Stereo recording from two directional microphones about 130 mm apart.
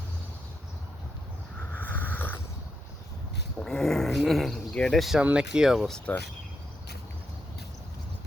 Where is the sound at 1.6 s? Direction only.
15° left (ahead or behind).